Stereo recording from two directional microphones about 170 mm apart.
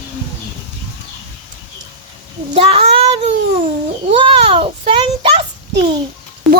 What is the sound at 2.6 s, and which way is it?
Child singing, 30° right (ahead or behind).